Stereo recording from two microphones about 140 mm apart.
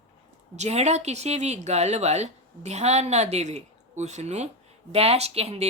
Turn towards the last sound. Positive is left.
turn(degrees=-45)  # may be behind; listen again after turning